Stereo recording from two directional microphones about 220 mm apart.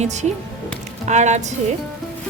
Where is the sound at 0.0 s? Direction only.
30° right (ahead or behind).